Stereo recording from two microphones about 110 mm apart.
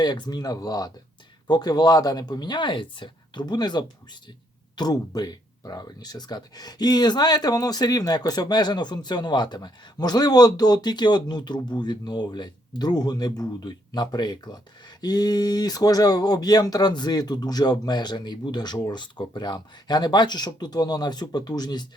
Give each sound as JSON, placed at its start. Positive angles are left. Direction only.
{"t": 0.0, "sound": "speech", "side_deg": 40}